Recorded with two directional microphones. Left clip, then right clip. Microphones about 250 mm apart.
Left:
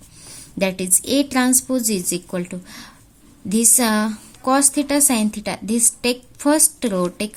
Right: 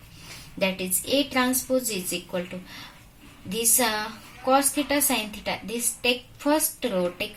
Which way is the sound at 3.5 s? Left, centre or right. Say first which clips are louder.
Left 6 dB; left.